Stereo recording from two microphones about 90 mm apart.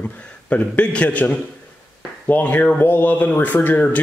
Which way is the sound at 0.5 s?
15° left (ahead or behind).